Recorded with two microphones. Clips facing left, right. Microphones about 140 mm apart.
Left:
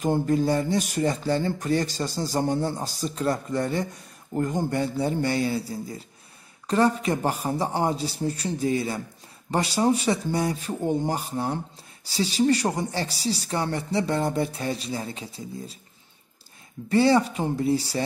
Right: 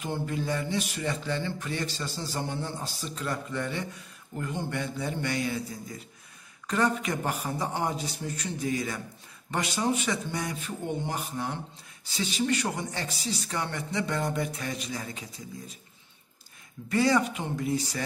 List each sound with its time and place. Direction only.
0.0 s speech: 40° left (ahead or behind)
16.9 s speech: 30° left (ahead or behind)